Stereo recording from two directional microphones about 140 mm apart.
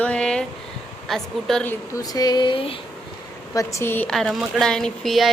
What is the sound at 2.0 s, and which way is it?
Speech, 25° left (ahead or behind).